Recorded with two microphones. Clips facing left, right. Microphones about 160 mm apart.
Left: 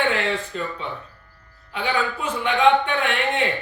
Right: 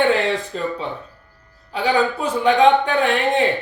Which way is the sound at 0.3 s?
35° right (ahead or behind).